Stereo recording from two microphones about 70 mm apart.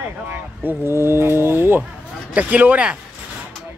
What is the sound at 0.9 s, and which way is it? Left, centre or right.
Speech, right.